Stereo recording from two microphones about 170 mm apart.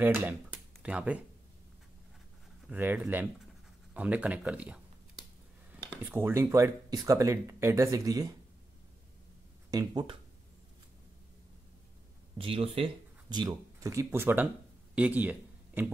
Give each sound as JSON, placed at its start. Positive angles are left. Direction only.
{"t": 0.0, "sound": "speech", "side_deg": -10}
{"t": 2.7, "sound": "speech", "side_deg": -10}
{"t": 9.7, "sound": "speech", "side_deg": -20}
{"t": 12.4, "sound": "speech", "side_deg": -35}